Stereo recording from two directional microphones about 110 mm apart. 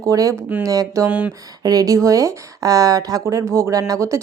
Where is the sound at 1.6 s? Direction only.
35° right (ahead or behind).